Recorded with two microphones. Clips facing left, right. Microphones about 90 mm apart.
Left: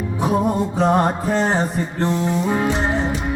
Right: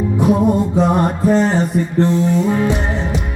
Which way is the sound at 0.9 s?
25° left (ahead or behind).